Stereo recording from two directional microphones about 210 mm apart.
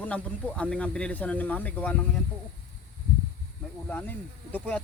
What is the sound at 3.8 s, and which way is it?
Speech, 10° left (ahead or behind).